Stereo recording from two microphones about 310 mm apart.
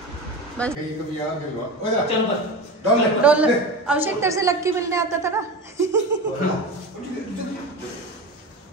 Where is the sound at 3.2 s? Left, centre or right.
Centre.